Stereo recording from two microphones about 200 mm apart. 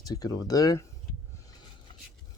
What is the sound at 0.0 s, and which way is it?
Speech, 20° left (ahead or behind).